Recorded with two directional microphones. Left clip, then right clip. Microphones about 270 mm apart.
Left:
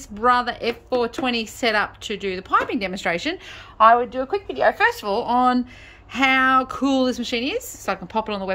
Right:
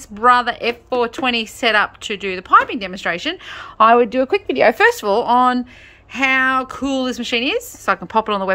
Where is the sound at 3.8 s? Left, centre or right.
Right.